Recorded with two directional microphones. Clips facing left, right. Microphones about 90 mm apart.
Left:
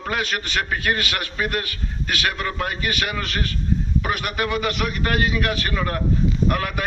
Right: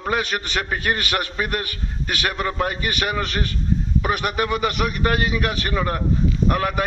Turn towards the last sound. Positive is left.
turn(degrees=-25)  # may be behind; listen again after turning